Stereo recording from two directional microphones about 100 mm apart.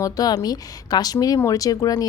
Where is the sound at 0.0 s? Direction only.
35° left (ahead or behind).